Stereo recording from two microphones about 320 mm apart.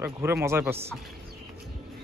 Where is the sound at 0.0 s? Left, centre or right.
Centre.